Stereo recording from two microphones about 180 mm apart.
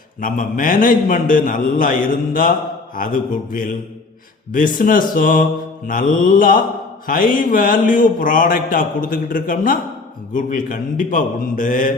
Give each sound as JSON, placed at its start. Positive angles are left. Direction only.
{"t": 0.2, "sound": "a man's voice", "side_deg": 50}